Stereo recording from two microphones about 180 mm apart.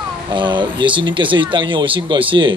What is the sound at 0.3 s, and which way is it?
Speech, 25° right (ahead or behind).